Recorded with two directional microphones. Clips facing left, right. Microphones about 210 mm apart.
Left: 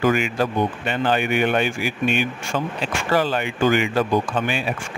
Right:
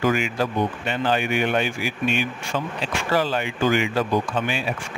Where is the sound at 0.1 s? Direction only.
55° left (ahead or behind).